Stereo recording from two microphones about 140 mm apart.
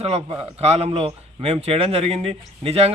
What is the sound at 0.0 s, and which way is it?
A man's voice, 45° right (ahead or behind).